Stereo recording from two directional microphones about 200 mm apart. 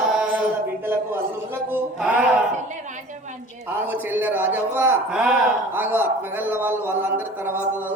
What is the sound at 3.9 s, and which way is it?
Speech, 10° right (ahead or behind).